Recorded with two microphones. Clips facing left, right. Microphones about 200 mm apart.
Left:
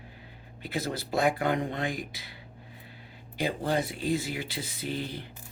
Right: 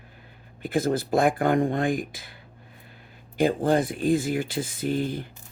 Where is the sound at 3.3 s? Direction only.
50° right (ahead or behind).